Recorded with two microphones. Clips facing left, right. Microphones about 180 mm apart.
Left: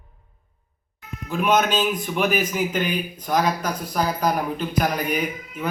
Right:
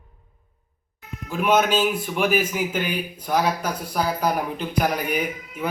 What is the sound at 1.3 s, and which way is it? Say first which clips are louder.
A man's voice: even; 10° right (ahead or behind).